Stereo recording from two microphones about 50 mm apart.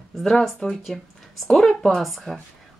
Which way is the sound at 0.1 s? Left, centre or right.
Centre.